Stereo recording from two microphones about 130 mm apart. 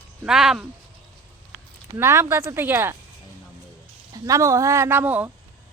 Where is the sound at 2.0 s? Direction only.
20° right (ahead or behind).